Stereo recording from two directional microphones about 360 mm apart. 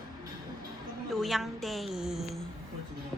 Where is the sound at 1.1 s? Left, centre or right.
Centre.